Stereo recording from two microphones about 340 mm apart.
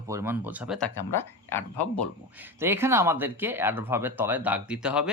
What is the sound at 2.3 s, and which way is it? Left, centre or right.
Speech, centre.